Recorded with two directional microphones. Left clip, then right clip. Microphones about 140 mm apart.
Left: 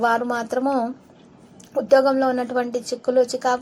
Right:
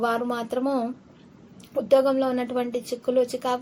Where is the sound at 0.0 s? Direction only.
5° left (ahead or behind).